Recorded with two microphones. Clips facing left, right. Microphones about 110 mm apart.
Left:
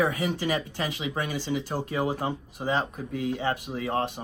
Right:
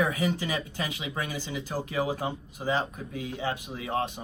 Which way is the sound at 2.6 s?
50° left (ahead or behind).